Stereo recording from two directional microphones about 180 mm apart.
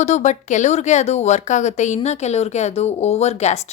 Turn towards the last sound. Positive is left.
turn(degrees=35)  # may be behind; listen again after turning